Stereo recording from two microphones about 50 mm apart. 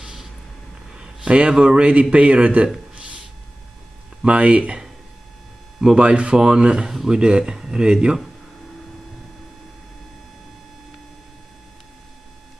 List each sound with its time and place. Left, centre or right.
0.0 s vehicle: centre
0.9 s a man's voice: centre
2.9 s a sound: right
4.2 s a man's voice: right
5.9 s a man's voice: right